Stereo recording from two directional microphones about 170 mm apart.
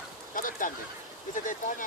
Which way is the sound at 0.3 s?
50° left (ahead or behind).